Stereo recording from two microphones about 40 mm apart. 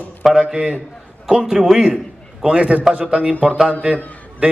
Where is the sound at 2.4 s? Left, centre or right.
Right.